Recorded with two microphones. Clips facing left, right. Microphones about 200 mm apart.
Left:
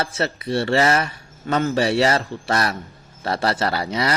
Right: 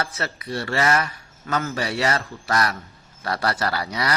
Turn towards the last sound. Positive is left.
turn(degrees=25)  # may be behind; listen again after turning